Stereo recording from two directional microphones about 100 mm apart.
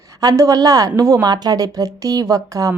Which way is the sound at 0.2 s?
35° right (ahead or behind).